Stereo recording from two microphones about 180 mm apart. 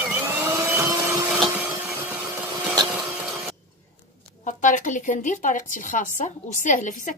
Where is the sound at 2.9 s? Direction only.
5° right (ahead or behind).